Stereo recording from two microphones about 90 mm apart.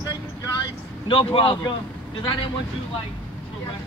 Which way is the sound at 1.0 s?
85° left.